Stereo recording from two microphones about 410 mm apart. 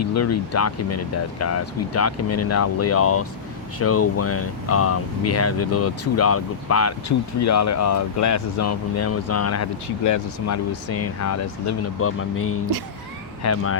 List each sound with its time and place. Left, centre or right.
0.0 s speech: left